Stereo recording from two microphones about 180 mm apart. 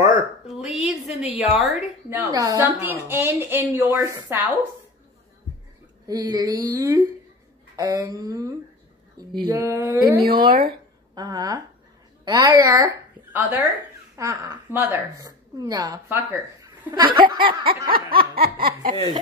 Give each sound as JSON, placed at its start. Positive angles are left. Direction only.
{"t": 0.5, "sound": "speech", "side_deg": 0}
{"t": 2.0, "sound": "a woman's voice", "side_deg": -15}
{"t": 6.0, "sound": "a woman's voice", "side_deg": -20}
{"t": 10.2, "sound": "a sound", "side_deg": -55}
{"t": 11.1, "sound": "a woman's voice", "side_deg": -20}
{"t": 14.1, "sound": "a woman's voice", "side_deg": -20}
{"t": 14.7, "sound": "a woman's voice", "side_deg": -10}
{"t": 18.3, "sound": "a sound", "side_deg": -55}